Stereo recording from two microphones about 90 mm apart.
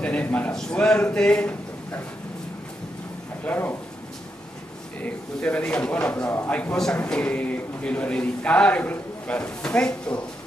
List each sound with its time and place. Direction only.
0.0 s a sound: 15° left (ahead or behind)
0.5 s a man's voice: 10° left (ahead or behind)
3.4 s speech: 20° left (ahead or behind)
5.0 s a man's voice: 15° left (ahead or behind)